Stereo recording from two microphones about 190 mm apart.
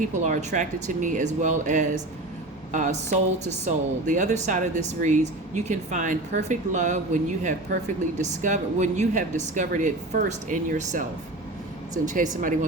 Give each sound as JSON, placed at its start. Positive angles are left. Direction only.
{"t": 0.1, "sound": "speech", "side_deg": -40}
{"t": 12.0, "sound": "speech", "side_deg": -40}